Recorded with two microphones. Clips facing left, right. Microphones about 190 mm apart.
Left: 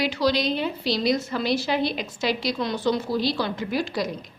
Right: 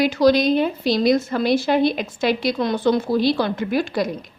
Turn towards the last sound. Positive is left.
turn(degrees=-55)  # may be behind; listen again after turning